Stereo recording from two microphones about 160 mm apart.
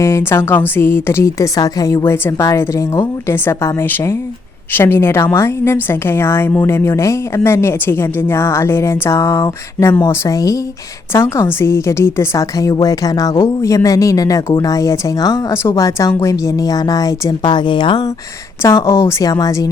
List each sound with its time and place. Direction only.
0.0 s a woman's voice: 15° left (ahead or behind)
18.6 s speech: 15° left (ahead or behind)